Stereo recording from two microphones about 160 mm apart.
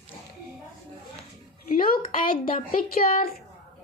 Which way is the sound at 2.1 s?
60° left (ahead or behind).